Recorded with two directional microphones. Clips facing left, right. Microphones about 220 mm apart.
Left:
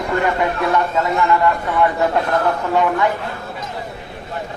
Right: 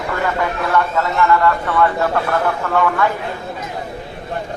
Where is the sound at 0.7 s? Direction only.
20° left (ahead or behind).